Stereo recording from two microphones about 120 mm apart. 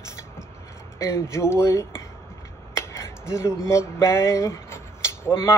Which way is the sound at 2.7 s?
25° left (ahead or behind).